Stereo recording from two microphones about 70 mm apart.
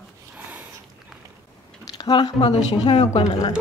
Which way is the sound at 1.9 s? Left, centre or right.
Left.